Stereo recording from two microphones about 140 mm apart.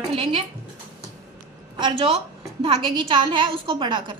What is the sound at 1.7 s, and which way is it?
A woman's voice, 35° right (ahead or behind).